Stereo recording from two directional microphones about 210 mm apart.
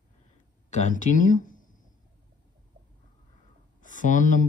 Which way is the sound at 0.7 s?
35° left (ahead or behind).